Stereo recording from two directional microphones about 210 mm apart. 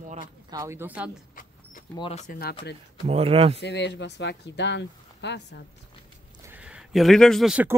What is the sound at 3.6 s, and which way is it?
Speech, 55° left (ahead or behind).